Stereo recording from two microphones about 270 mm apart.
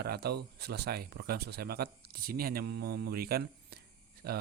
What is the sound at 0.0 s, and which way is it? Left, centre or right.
Speech, right.